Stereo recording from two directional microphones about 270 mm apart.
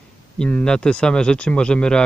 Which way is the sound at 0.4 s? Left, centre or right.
Centre.